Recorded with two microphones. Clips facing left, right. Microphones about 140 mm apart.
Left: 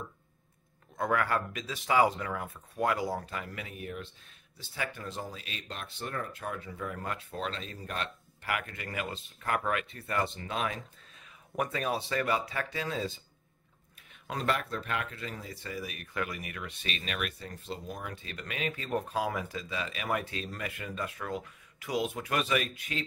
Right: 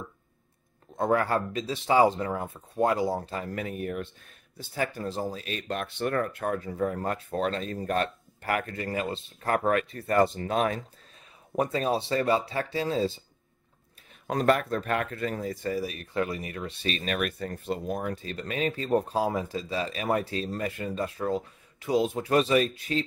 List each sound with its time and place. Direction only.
0.9 s speech: 30° right (ahead or behind); by 4.1 s 50° right (ahead or behind)
4.6 s speech: 40° right (ahead or behind)
11.5 s speech: 30° right (ahead or behind)
14.2 s speech: 45° right (ahead or behind)